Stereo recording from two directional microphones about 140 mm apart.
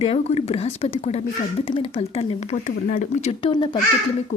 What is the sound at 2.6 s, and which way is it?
Speech, 65° left (ahead or behind).